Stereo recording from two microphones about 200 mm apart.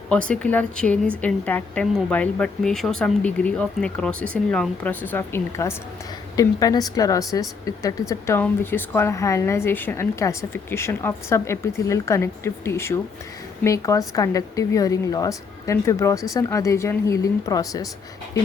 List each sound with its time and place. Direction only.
0.3 s a woman's voice: 5° left (ahead or behind)